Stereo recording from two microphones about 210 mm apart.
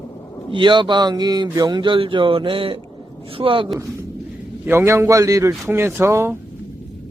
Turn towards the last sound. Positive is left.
turn(degrees=-10)  # may be behind; listen again after turning